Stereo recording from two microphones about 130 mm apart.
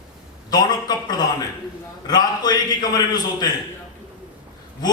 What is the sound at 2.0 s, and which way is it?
A man's voice, 30° left (ahead or behind).